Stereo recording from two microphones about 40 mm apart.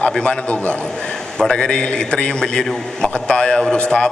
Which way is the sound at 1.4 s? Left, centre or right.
Centre.